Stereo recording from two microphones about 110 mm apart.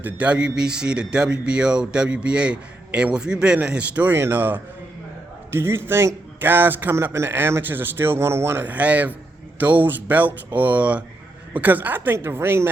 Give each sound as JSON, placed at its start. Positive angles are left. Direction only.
{"t": 0.0, "sound": "a man's voice", "side_deg": -10}